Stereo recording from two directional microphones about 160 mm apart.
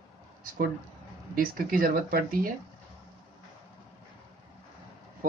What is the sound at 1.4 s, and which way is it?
Speech, 65° right (ahead or behind).